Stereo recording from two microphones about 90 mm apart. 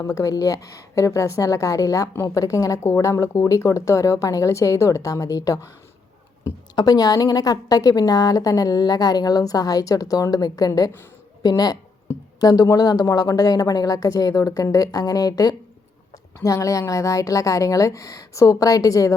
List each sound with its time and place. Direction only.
0.0 s speech: 40° left (ahead or behind)
6.7 s a woman's voice: 45° left (ahead or behind)